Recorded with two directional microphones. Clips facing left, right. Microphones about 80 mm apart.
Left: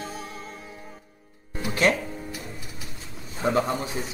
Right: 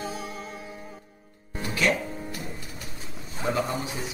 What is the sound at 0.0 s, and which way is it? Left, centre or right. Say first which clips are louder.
Music: right 2 dB; centre.